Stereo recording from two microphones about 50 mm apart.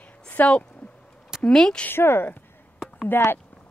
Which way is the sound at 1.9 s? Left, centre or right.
Left.